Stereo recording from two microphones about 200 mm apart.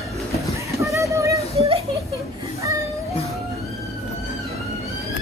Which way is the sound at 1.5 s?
30° right (ahead or behind).